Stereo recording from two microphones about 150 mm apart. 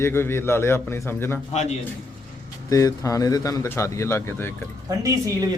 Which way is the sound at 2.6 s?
20° left (ahead or behind).